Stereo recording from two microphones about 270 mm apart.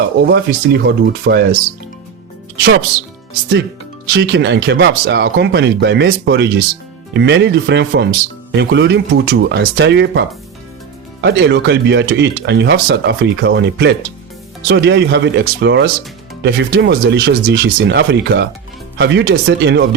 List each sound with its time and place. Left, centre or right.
0.2 s speech: right
4.0 s speech: right